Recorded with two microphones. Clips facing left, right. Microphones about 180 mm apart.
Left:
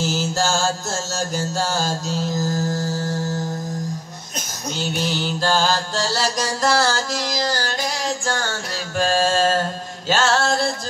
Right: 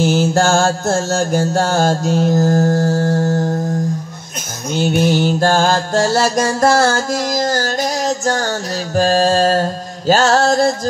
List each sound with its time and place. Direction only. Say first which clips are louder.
0.0 s mantra: right 8 dB; 55° right (ahead or behind)
4.7 s music: right 10 dB; 55° right (ahead or behind)
8.9 s mantra: right 6 dB; 40° right (ahead or behind)